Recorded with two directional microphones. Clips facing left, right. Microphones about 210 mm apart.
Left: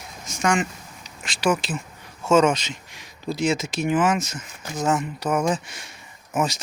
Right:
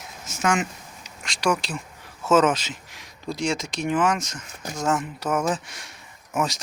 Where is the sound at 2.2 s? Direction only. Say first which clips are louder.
Left 1 dB; 5° right (ahead or behind).